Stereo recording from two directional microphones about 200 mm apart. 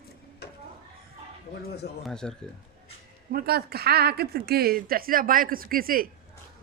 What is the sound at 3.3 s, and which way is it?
Speech, 50° right (ahead or behind).